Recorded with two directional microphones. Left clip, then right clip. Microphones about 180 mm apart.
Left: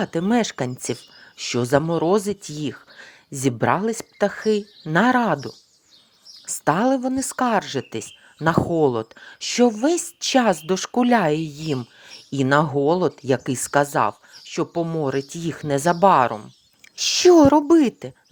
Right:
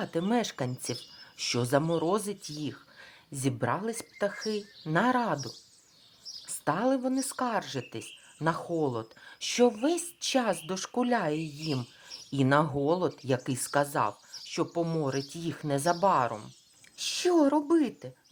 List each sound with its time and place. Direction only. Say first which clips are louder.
0.0 s speech: left 8 dB; 35° left (ahead or behind)
1.4 s a woman's voice: left 8 dB; 25° left (ahead or behind); by 18.1 s 40° left (ahead or behind)